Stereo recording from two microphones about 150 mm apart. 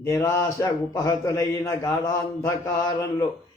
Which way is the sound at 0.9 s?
20° left (ahead or behind).